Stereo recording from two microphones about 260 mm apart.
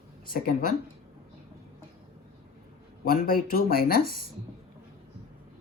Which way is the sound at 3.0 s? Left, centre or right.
Left.